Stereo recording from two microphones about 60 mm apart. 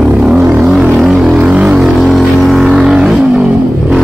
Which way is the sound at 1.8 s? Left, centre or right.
Centre.